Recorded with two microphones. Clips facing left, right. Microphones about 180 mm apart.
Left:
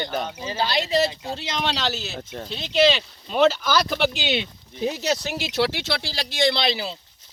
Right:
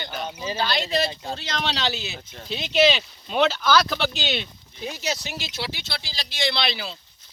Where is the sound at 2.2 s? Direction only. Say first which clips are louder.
Left 9 dB; 55° left (ahead or behind).